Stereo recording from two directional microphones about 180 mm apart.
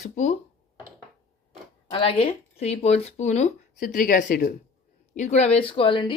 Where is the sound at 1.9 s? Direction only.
30° left (ahead or behind).